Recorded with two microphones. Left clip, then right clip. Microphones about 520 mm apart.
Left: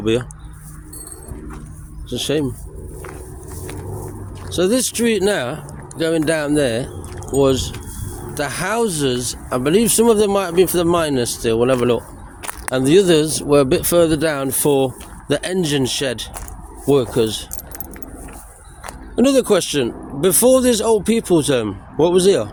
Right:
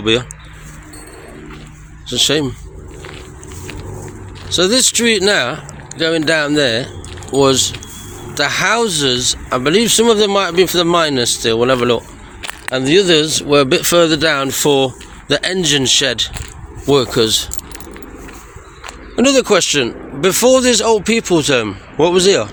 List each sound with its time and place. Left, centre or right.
0.0 s speech: left
2.0 s speech: left
4.4 s speech: left
12.7 s speech: left
18.9 s speech: left